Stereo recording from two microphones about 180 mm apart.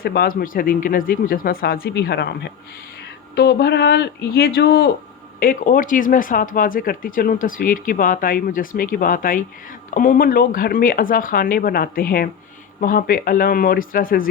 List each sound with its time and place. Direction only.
0.0 s speech: 60° left (ahead or behind)